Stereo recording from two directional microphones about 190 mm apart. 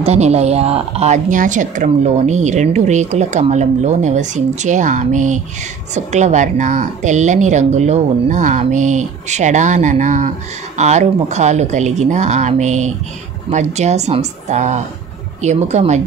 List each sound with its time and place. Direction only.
0.0 s a woman's voice: 35° right (ahead or behind)